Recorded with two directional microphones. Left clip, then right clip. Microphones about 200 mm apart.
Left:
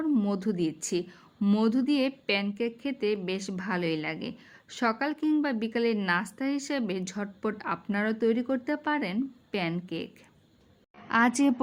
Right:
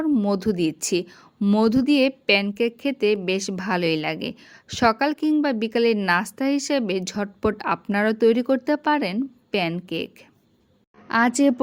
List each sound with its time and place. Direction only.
0.0 s a woman's voice: 25° right (ahead or behind)
11.1 s a woman's voice: 20° right (ahead or behind)